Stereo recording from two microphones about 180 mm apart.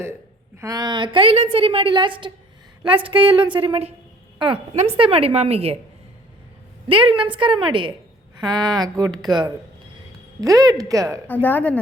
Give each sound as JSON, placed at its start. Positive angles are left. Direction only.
{"t": 0.6, "sound": "a woman's voice", "side_deg": -20}
{"t": 6.8, "sound": "a woman's voice", "side_deg": -30}
{"t": 11.4, "sound": "a woman's voice", "side_deg": 10}